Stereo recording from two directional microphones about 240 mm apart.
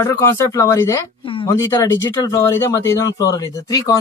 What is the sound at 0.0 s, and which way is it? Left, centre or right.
Speech, centre.